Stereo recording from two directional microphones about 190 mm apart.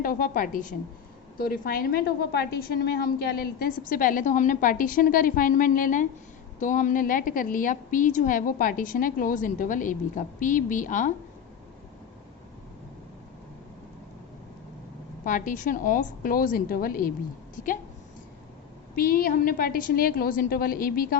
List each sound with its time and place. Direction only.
0.0 s a woman's voice: 45° left (ahead or behind)
15.2 s a woman's voice: 45° left (ahead or behind)
18.9 s a woman's voice: 50° left (ahead or behind)